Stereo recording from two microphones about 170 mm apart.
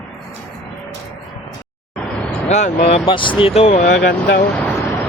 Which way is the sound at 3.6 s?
45° left (ahead or behind).